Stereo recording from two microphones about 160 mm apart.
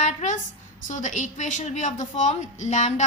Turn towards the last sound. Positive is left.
turn(degrees=50)  # may be behind; listen again after turning